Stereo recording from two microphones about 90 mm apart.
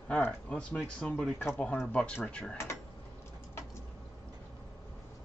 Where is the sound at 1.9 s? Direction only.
15° left (ahead or behind).